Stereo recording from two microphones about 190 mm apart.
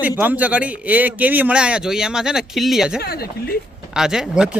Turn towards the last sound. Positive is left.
turn(degrees=-5)  # may be behind; listen again after turning